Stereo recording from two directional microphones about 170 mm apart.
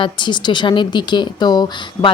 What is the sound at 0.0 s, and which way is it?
A woman's voice, 25° left (ahead or behind).